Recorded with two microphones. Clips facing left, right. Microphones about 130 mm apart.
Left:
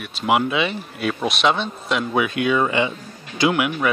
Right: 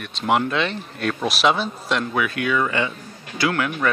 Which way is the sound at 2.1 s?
20° left (ahead or behind).